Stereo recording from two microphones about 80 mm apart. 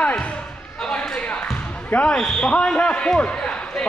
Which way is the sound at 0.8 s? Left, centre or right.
Centre.